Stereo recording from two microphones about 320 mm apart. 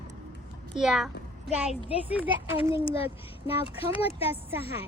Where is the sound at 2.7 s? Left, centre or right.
Centre.